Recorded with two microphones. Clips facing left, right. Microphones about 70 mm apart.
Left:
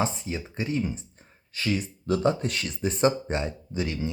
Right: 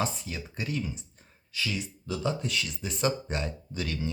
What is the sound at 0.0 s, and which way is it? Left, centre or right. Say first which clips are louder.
Speech: left 4 dB; left.